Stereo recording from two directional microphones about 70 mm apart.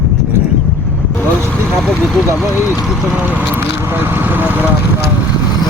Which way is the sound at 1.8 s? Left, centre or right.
Centre.